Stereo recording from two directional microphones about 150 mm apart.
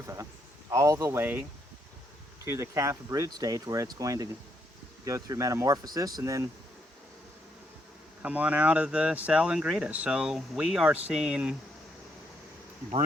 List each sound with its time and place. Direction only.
0.7 s speech: 20° right (ahead or behind)
8.2 s speech: 10° right (ahead or behind)